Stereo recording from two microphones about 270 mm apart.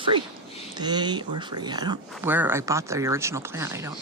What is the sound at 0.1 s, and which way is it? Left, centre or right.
Speech, centre.